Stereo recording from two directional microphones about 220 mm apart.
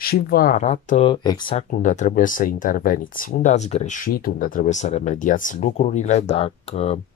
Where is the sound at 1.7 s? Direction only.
35° left (ahead or behind).